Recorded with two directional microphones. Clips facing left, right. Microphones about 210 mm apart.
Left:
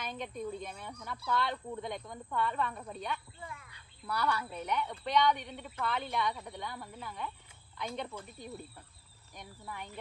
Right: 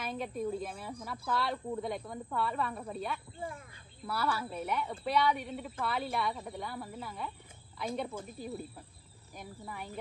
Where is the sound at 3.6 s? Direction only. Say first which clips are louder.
Right 6 dB; 50° right (ahead or behind).